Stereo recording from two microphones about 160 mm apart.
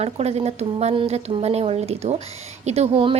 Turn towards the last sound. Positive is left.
turn(degrees=-35)  # may be behind; listen again after turning